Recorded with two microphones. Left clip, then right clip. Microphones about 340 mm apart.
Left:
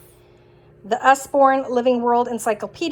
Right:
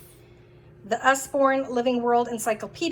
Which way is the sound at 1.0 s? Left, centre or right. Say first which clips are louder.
Left 6 dB; centre.